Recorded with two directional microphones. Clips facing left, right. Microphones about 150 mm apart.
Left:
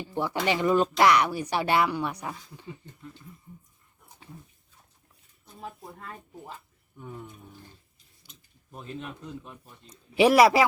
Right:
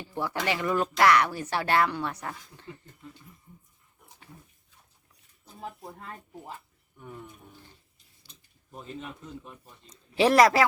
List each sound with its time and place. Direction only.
0.0 s speech: 20° left (ahead or behind)
8.7 s a man's voice: centre (ahead or behind)
9.8 s speech: 10° left (ahead or behind)